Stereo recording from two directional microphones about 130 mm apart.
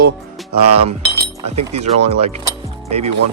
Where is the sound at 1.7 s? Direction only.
55° right (ahead or behind).